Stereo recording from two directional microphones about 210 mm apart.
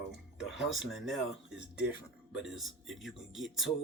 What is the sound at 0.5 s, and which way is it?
Speech, centre (ahead or behind).